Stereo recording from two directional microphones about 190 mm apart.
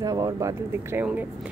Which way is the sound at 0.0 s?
20° right (ahead or behind).